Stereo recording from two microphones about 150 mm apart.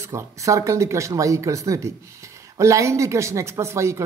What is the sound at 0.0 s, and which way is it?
Speech, 20° right (ahead or behind).